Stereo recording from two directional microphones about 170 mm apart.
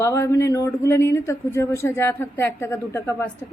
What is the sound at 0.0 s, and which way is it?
Speech, 15° left (ahead or behind).